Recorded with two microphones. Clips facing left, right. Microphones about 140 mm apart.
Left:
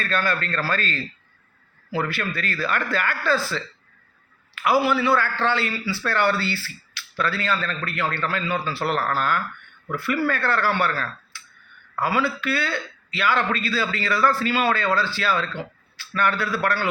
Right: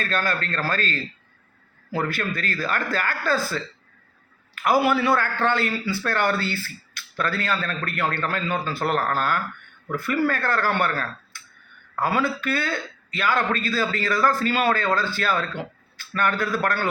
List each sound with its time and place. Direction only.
0.0 s a man's voice: 45° right (ahead or behind)